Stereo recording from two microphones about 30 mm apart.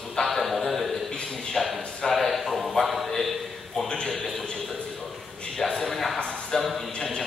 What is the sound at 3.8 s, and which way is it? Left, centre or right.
Speech, left.